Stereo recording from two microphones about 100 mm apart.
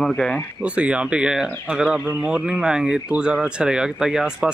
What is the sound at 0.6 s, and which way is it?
Speech, 10° right (ahead or behind).